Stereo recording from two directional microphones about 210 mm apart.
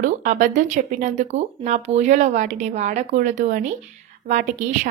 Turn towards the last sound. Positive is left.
turn(degrees=-35)  # may be behind; listen again after turning